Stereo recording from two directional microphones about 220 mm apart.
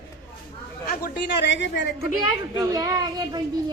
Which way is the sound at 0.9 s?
45° left (ahead or behind).